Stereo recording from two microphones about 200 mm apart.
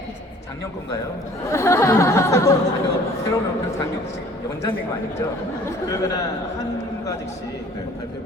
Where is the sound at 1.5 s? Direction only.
15° left (ahead or behind).